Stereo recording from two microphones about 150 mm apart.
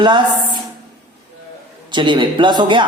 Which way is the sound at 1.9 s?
30° right (ahead or behind).